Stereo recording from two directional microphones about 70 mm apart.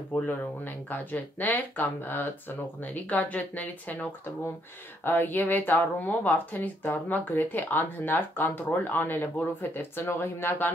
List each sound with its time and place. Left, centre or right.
0.1 s speech: left